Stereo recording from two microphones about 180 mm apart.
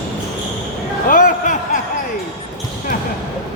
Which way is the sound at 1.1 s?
45° left (ahead or behind).